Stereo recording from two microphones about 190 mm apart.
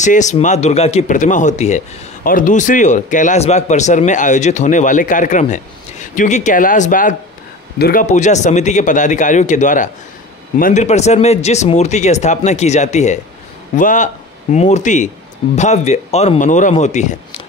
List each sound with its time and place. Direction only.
0.0 s speech: 40° left (ahead or behind)